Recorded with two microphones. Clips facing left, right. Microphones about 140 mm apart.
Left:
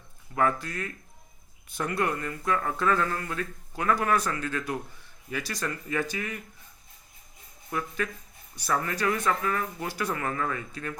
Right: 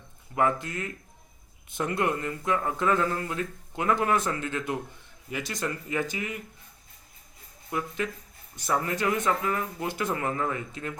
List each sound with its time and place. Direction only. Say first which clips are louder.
0.3 s speech: right 1 dB; 20° right (ahead or behind)
7.7 s speech: right 1 dB; 20° right (ahead or behind)